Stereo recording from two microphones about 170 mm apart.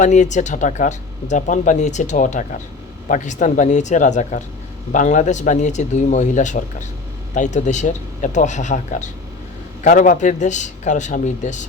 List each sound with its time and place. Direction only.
0.0 s speech: 45° left (ahead or behind)